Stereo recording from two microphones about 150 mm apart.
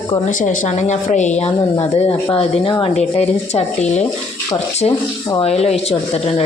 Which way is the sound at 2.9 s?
45° left (ahead or behind).